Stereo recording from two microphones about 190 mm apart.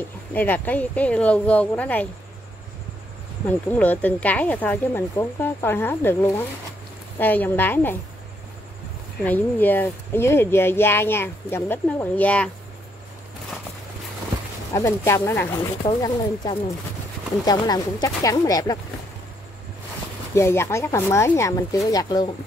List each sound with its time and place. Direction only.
0.3 s speech: 10° left (ahead or behind)
3.4 s speech: 10° left (ahead or behind)
9.2 s speech: 10° left (ahead or behind)
14.7 s speech: 15° left (ahead or behind)
18.0 s speech: 20° left (ahead or behind)
20.3 s speech: 15° left (ahead or behind)